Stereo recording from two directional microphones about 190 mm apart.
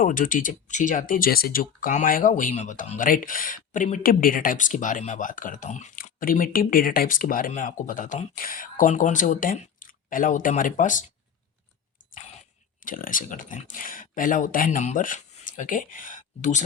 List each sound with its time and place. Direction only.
0.0 s speech: 45° left (ahead or behind)
12.8 s speech: 45° left (ahead or behind)